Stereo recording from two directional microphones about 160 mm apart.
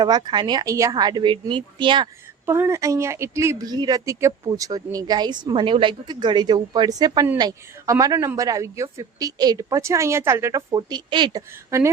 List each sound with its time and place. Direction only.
0.0 s speech: 25° right (ahead or behind)
2.5 s speech: 15° right (ahead or behind)